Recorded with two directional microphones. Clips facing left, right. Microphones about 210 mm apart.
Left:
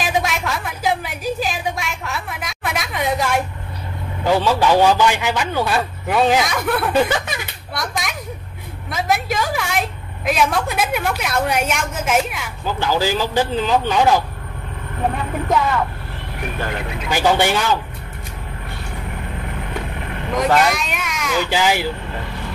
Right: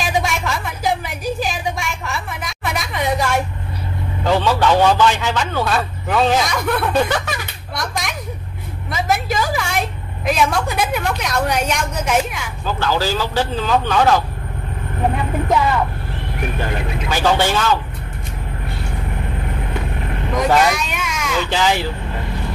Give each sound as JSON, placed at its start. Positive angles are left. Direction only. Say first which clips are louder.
{"t": 0.0, "sound": "a sound", "louder": "even", "side_deg": 0}
{"t": 6.4, "sound": "speech", "louder": "even", "side_deg": 0}
{"t": 7.7, "sound": "a sound", "louder": "even", "side_deg": 0}
{"t": 8.9, "sound": "vehicle", "louder": "right 1 dB", "side_deg": 0}
{"t": 12.6, "sound": "a man's voice", "louder": "even", "side_deg": 15}
{"t": 17.1, "sound": "a man's voice", "louder": "left 1 dB", "side_deg": 15}
{"t": 20.3, "sound": "a child's voice", "louder": "right 1 dB", "side_deg": 0}